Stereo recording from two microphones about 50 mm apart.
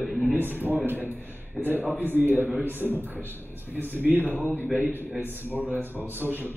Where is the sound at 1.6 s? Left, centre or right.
Centre.